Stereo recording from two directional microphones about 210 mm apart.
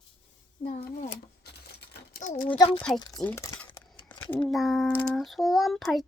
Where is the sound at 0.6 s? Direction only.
45° left (ahead or behind).